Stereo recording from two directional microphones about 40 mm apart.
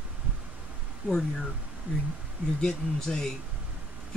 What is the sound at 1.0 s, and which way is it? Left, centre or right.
Speech, right.